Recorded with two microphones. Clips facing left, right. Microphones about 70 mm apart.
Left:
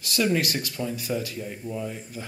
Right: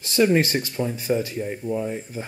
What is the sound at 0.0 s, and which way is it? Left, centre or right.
Speech, right.